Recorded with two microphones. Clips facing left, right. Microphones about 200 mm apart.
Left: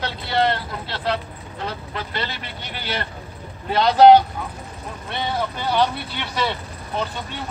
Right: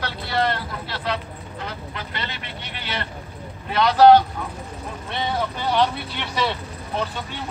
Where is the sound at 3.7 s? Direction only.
25° left (ahead or behind).